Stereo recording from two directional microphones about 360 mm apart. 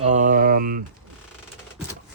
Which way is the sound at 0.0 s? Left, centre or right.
Centre.